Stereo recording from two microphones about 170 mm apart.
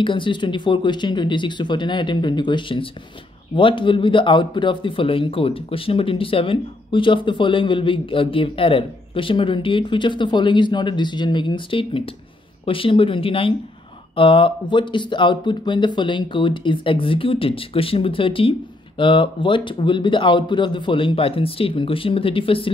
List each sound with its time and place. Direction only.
0.0 s speech: 30° left (ahead or behind)